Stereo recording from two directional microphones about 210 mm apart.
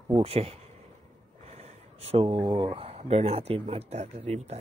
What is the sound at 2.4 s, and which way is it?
Speech, 20° right (ahead or behind).